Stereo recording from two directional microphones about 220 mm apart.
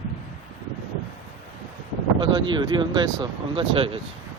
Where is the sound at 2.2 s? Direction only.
20° right (ahead or behind).